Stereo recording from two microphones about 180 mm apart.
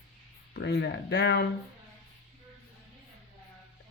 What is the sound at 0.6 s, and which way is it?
Speech, 70° left (ahead or behind).